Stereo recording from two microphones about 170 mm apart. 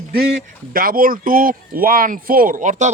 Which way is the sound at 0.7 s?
55° right (ahead or behind).